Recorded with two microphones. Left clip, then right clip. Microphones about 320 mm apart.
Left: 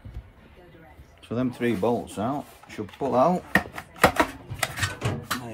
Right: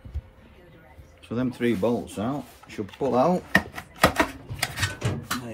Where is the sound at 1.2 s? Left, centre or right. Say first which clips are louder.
Even; centre.